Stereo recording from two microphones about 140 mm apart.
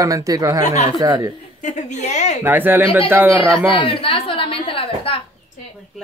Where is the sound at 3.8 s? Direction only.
40° left (ahead or behind).